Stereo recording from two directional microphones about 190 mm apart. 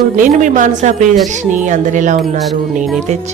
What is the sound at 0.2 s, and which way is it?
A woman's voice, 40° right (ahead or behind).